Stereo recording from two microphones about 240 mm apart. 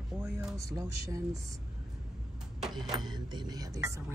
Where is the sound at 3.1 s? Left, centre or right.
Centre.